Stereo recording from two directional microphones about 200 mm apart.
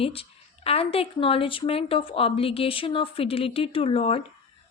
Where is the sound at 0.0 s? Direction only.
30° left (ahead or behind).